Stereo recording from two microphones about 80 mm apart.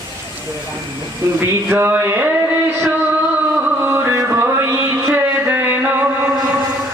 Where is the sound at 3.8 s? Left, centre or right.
Right.